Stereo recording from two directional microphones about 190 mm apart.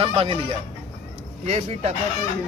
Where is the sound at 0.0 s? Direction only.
30° right (ahead or behind).